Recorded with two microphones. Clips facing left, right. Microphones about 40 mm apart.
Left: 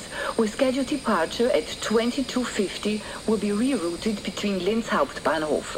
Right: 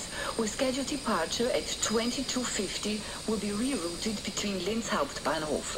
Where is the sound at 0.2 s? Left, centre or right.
Left.